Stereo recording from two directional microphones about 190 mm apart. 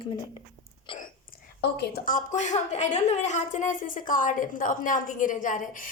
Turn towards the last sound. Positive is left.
turn(degrees=45)  # may be behind; listen again after turning